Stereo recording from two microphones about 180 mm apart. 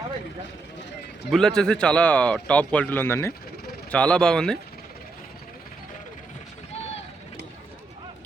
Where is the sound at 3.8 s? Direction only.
5° left (ahead or behind).